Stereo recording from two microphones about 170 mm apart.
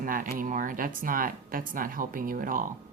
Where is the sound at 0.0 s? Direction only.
50° right (ahead or behind).